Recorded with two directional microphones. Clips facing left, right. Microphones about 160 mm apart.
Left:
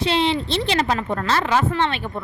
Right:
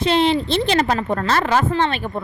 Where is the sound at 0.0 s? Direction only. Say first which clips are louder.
Right 3 dB; 50° right (ahead or behind).